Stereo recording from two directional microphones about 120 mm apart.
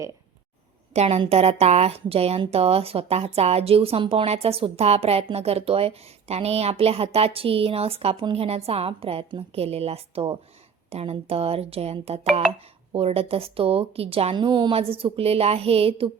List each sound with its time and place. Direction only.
0.9 s a woman's voice: 65° right (ahead or behind)
14.3 s a woman's voice: 40° right (ahead or behind)